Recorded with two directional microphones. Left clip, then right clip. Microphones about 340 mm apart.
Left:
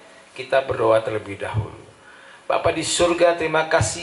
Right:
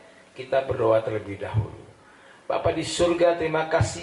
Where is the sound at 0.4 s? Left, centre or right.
Centre.